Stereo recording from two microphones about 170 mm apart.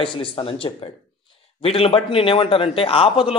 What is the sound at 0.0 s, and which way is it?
A man's voice, 30° left (ahead or behind).